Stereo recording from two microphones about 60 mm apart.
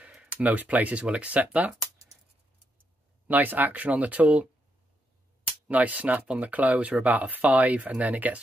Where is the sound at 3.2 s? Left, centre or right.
Right.